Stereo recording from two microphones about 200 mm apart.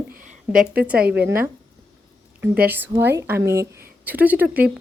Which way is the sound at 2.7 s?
10° right (ahead or behind).